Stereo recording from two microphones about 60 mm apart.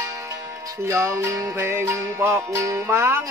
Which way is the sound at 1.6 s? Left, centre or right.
Right.